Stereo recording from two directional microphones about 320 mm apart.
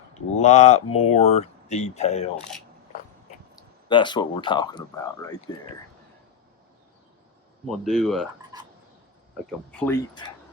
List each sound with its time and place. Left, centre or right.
0.4 s speech: left
0.9 s speech: left
1.1 s speech: centre
3.8 s speech: centre
7.7 s speech: centre
8.5 s frog: centre
9.5 s speech: centre